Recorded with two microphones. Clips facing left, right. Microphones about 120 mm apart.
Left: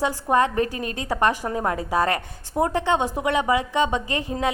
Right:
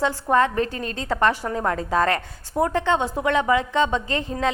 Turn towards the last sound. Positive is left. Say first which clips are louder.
# right 1 dB
turn(degrees=15)  # may be behind; listen again after turning